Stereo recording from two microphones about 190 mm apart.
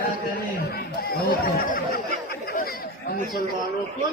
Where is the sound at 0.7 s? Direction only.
55° left (ahead or behind).